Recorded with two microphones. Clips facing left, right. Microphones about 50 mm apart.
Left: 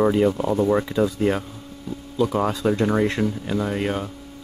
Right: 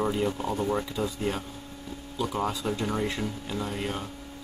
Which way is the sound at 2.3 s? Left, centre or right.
Left.